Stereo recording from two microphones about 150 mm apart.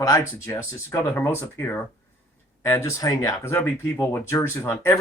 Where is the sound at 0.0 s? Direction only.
20° left (ahead or behind).